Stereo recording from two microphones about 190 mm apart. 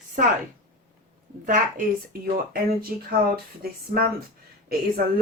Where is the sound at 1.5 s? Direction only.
45° right (ahead or behind).